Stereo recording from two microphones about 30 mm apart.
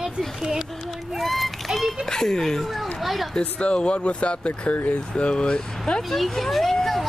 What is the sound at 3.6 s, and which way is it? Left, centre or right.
Speech, left.